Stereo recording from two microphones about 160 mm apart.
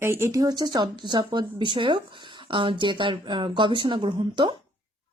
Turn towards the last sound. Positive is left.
turn(degrees=-30)  # may be behind; listen again after turning